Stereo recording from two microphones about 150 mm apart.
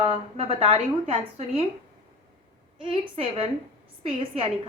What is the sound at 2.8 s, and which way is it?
A woman's voice, 40° right (ahead or behind).